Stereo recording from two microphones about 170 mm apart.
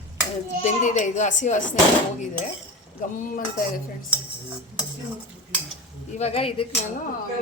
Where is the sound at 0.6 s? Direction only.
45° left (ahead or behind).